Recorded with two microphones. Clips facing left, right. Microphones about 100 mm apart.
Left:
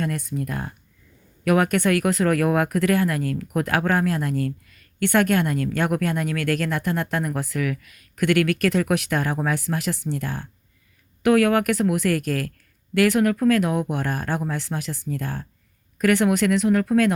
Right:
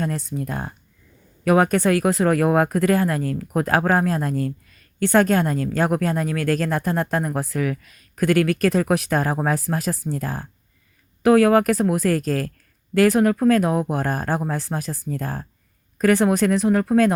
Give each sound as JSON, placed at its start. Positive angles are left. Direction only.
{"t": 0.0, "sound": "speech", "side_deg": -25}